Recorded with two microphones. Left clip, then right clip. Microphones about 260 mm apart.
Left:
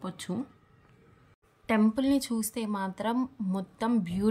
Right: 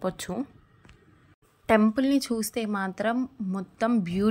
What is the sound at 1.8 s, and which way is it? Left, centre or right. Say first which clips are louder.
Speech: right 3 dB; centre.